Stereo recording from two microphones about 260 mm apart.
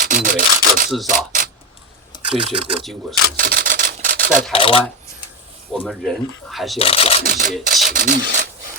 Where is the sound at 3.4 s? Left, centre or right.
Right.